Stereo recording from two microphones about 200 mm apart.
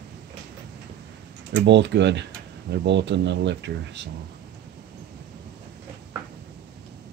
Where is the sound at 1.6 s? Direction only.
60° right (ahead or behind).